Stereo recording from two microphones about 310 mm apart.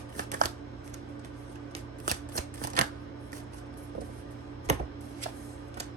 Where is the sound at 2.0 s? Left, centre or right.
Right.